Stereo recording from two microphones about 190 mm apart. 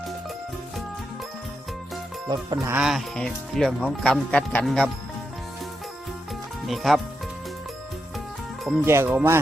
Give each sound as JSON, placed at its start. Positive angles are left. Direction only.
{"t": 2.2, "sound": "music", "side_deg": -20}
{"t": 2.7, "sound": "speech", "side_deg": -5}
{"t": 6.7, "sound": "speech", "side_deg": 0}
{"t": 8.8, "sound": "speech", "side_deg": -15}